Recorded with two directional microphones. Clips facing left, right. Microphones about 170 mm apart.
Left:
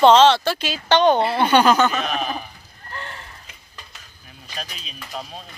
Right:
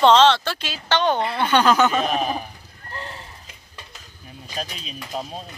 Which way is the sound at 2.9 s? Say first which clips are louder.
Even; 35° right (ahead or behind).